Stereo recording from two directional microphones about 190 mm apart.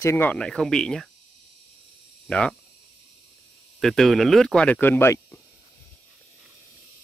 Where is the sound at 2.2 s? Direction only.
5° left (ahead or behind).